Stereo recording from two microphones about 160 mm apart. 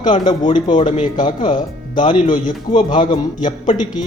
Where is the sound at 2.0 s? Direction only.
35° left (ahead or behind).